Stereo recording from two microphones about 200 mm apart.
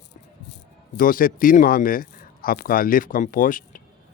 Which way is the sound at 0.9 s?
45° left (ahead or behind).